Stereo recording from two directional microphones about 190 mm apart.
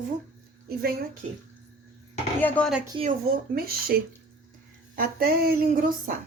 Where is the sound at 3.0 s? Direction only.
45° right (ahead or behind).